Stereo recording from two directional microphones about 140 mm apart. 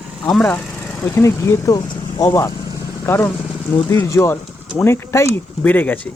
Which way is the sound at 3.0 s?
15° left (ahead or behind).